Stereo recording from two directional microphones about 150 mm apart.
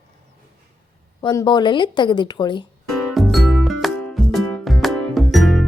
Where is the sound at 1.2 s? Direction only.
30° left (ahead or behind).